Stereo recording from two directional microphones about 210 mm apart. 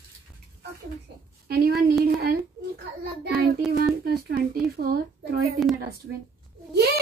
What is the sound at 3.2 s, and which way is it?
Child singing, 50° right (ahead or behind).